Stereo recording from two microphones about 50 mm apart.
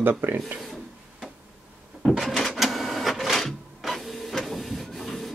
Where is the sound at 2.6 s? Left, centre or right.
Centre.